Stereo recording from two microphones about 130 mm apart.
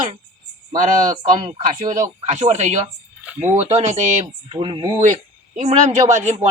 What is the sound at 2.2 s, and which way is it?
Speech, 60° right (ahead or behind).